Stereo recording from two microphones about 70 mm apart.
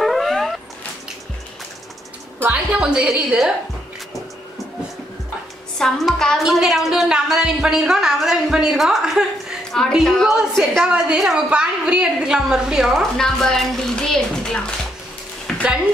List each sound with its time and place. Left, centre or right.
0.0 s dog: centre
2.4 s a woman's voice: centre
5.8 s a woman's voice: centre
9.7 s music: centre
10.0 s a woman's voice: centre
10.3 s a woman's voice: centre
13.2 s speech: centre